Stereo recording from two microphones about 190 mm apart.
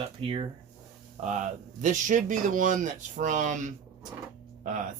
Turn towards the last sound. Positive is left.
turn(degrees=-40)  # may be behind; listen again after turning